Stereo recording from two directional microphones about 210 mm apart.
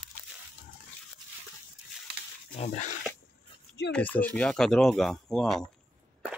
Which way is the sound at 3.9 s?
10° left (ahead or behind).